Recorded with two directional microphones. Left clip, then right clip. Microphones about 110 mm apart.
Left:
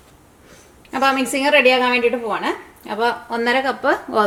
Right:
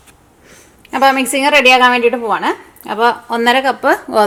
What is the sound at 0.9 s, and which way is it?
A woman's voice, 40° right (ahead or behind).